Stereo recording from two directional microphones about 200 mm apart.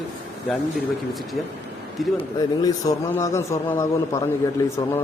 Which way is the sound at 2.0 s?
Centre (ahead or behind).